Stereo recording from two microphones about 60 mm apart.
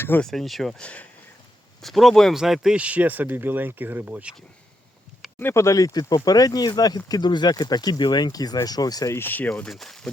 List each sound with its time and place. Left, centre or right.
0.2 s speech: centre
0.8 s speech: left
1.8 s speech: centre
2.3 s speech: centre
2.7 s speech: right
5.5 s speech: left
9.0 s speech: left
9.6 s speech: centre